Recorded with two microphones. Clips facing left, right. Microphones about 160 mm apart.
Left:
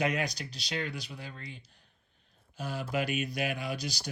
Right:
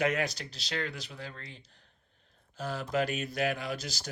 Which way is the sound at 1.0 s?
15° left (ahead or behind).